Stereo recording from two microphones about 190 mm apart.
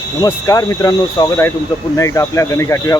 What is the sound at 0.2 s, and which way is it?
Speech, 15° left (ahead or behind).